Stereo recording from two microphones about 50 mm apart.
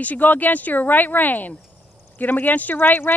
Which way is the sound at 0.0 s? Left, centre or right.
Left.